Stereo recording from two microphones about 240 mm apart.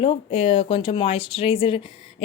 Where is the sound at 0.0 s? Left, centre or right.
Left.